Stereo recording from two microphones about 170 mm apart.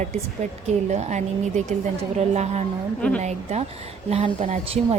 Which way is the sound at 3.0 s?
5° left (ahead or behind).